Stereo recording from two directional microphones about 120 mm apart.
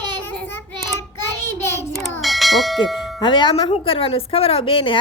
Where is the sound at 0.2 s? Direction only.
15° left (ahead or behind).